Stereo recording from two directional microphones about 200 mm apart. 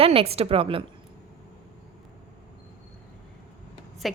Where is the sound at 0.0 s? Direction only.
30° right (ahead or behind).